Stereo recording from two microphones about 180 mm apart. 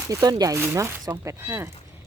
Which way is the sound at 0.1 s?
20° right (ahead or behind).